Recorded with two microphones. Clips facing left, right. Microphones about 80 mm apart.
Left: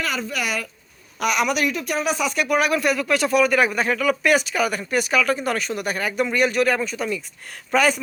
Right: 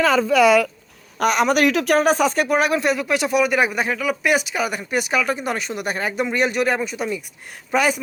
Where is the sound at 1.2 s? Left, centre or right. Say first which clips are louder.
Right 4 dB; right.